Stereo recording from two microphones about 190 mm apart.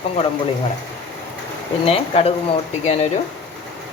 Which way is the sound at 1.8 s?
30° left (ahead or behind).